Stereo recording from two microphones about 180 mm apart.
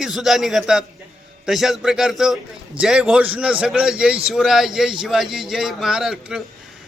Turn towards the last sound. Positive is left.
turn(degrees=-5)  # may be behind; listen again after turning